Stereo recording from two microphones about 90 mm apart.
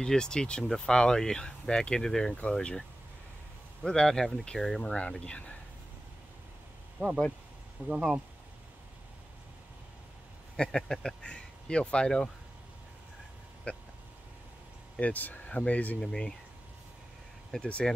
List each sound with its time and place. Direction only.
0.0 s speech: 10° left (ahead or behind)
3.8 s speech: 10° left (ahead or behind)
7.9 s speech: 5° right (ahead or behind)
10.5 s speech: 5° left (ahead or behind)
13.7 s speech: 15° left (ahead or behind)
15.0 s speech: 15° left (ahead or behind)
17.5 s speech: 10° left (ahead or behind)